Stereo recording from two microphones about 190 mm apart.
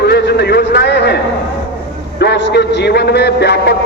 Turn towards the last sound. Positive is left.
turn(degrees=60)  # may be behind; listen again after turning